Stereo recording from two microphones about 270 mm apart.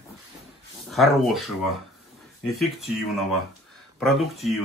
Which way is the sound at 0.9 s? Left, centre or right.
Centre.